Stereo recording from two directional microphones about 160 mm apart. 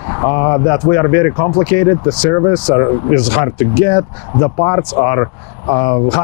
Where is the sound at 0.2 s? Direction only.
20° left (ahead or behind).